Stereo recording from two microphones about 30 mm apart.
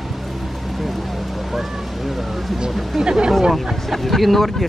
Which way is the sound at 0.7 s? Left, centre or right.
Centre.